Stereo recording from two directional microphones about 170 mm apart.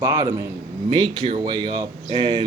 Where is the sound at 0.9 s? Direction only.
30° right (ahead or behind).